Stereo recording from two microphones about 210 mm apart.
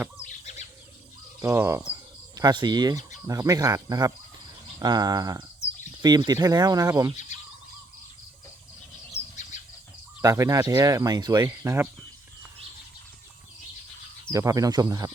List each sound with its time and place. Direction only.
0.2 s a sound: 35° left (ahead or behind)
1.4 s speech: 15° right (ahead or behind)
7.3 s bird: 35° left (ahead or behind)
9.1 s bird: 35° left (ahead or behind)
10.2 s speech: 15° right (ahead or behind)
14.3 s speech: 15° right (ahead or behind)